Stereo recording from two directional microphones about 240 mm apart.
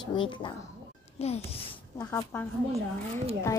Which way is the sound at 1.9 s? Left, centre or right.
Centre.